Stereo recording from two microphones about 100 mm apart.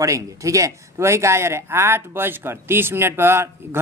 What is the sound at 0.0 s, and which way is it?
Speech, 30° right (ahead or behind).